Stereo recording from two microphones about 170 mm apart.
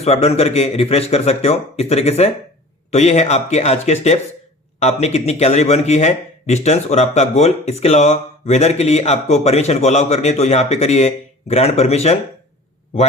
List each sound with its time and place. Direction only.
0.0 s a man's voice: 35° left (ahead or behind)